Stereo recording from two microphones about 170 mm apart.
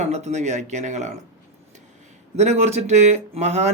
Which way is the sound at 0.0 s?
40° right (ahead or behind).